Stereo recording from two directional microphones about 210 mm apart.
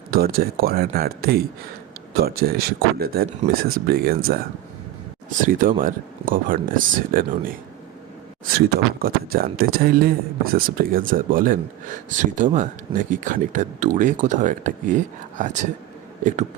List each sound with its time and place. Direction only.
0.1 s speech: 45° right (ahead or behind)
5.5 s speech: 40° right (ahead or behind)
8.5 s speech: 45° right (ahead or behind)